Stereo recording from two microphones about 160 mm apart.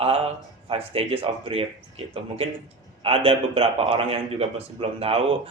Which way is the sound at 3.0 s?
35° right (ahead or behind).